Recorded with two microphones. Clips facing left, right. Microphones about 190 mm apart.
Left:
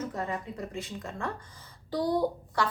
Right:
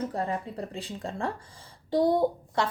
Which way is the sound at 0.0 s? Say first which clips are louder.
Right 3 dB; 35° right (ahead or behind).